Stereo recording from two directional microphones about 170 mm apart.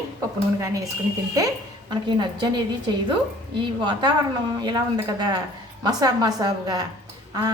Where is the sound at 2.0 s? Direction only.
25° right (ahead or behind).